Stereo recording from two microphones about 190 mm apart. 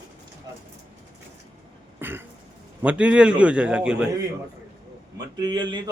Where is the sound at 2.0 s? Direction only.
10° right (ahead or behind).